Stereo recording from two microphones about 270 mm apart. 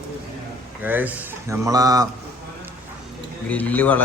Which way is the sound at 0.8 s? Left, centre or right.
Centre.